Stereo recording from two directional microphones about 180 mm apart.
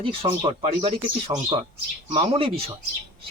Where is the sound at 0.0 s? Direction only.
30° right (ahead or behind).